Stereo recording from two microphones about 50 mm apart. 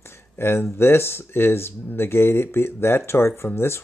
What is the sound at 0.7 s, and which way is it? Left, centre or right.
Speech, left.